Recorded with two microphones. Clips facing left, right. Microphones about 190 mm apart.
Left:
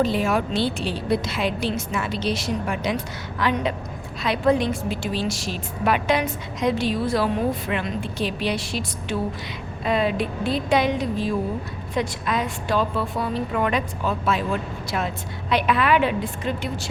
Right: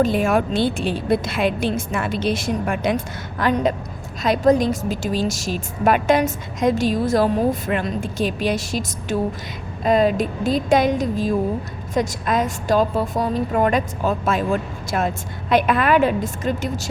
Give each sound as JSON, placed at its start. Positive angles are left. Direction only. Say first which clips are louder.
{"t": 0.0, "sound": "a woman's voice", "louder": "right 3 dB", "side_deg": -50}